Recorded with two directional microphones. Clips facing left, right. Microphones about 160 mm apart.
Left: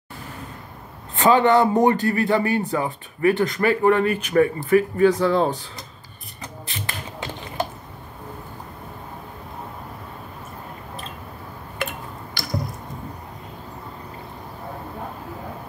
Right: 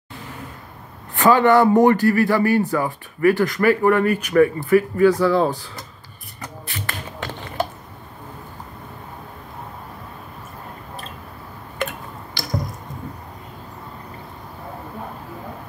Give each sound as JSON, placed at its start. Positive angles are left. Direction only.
{"t": 1.1, "sound": "speech", "side_deg": 25}
{"t": 6.7, "sound": "shuffling cards", "side_deg": 15}